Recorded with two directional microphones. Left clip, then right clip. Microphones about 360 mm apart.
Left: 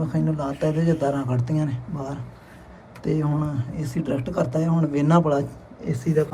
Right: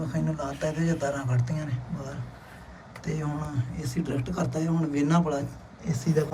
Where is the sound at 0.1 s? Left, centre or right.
Centre.